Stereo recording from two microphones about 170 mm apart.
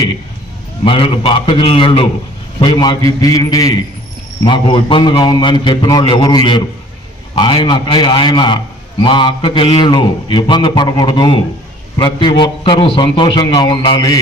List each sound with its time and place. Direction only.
0.9 s a man's voice: 35° left (ahead or behind)